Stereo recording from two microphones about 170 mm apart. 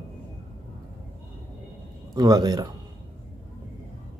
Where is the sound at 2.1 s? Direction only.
25° right (ahead or behind).